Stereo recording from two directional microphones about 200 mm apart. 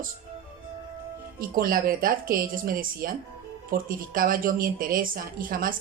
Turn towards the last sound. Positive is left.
turn(degrees=-45)  # may be behind; listen again after turning